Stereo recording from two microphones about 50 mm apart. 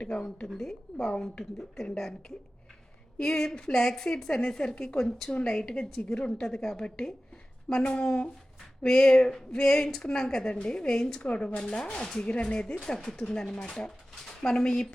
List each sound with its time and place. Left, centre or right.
0.0 s speech: left
0.4 s a woman's voice: centre
1.1 s a woman's voice: centre
1.5 s a woman's voice: centre
3.2 s a woman's voice: centre
4.9 s a woman's voice: centre